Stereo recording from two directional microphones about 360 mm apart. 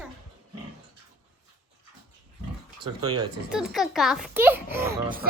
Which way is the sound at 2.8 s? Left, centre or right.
Centre.